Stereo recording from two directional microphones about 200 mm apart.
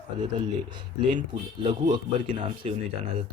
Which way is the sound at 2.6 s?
35° right (ahead or behind).